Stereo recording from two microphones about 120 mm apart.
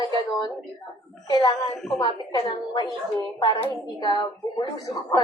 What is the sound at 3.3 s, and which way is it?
Hands, 45° left (ahead or behind).